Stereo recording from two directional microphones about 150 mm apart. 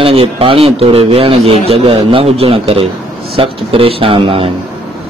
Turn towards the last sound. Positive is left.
turn(degrees=-40)  # may be behind; listen again after turning